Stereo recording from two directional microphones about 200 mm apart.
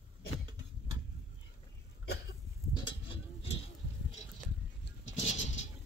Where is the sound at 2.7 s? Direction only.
25° left (ahead or behind).